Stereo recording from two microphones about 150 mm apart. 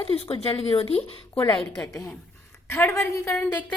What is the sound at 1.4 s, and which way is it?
Speech, 25° left (ahead or behind).